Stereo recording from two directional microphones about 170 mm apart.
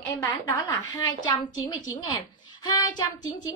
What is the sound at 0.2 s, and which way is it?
A woman's voice, 20° left (ahead or behind).